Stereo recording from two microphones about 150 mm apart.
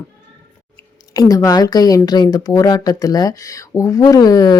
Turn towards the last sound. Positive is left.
turn(degrees=25)  # may be behind; listen again after turning